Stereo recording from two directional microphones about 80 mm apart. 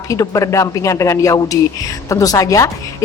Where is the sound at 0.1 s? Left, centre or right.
Left.